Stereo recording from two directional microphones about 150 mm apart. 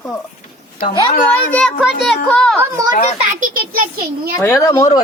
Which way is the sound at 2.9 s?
55° left (ahead or behind).